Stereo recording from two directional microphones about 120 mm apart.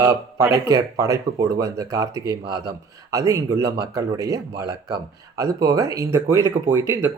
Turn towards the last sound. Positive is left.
turn(degrees=-25)  # may be behind; listen again after turning